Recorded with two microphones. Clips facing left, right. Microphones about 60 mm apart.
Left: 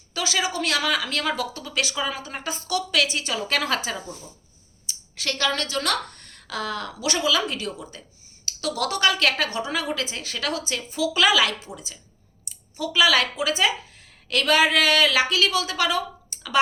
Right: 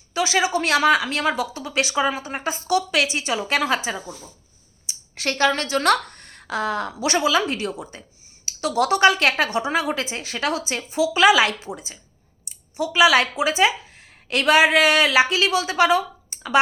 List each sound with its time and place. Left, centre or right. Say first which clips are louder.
0.1 s a woman's voice: right 5 dB; right
4.9 s a woman's voice: right 3 dB; right